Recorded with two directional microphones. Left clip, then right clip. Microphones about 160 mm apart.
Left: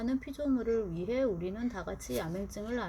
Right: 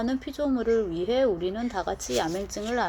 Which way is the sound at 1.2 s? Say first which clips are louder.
Right 8 dB; 55° right (ahead or behind).